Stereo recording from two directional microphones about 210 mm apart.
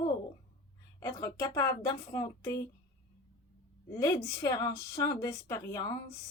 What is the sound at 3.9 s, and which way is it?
A woman's voice, 15° left (ahead or behind).